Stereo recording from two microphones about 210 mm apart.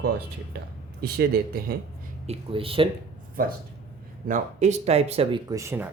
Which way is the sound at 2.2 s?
30° right (ahead or behind).